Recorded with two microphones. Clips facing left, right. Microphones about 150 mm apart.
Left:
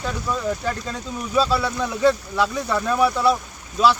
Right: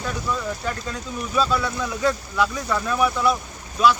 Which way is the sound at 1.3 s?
30° left (ahead or behind).